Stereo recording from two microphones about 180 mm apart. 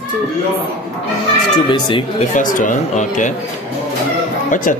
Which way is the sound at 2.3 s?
45° left (ahead or behind).